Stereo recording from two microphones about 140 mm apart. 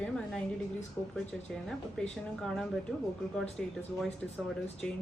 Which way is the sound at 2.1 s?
5° left (ahead or behind).